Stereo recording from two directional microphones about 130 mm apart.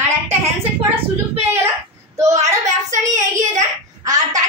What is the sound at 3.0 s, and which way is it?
A woman's voice, 25° right (ahead or behind).